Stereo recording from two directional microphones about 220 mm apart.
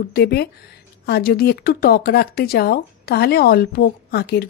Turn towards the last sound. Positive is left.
turn(degrees=50)  # may be behind; listen again after turning